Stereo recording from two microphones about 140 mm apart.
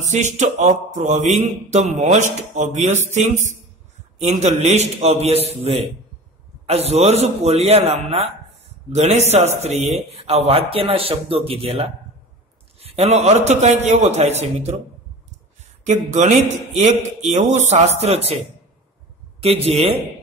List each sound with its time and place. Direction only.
0.0 s a man's voice: 55° right (ahead or behind)
16.1 s a man's voice: 60° right (ahead or behind)
19.4 s speech: 45° right (ahead or behind)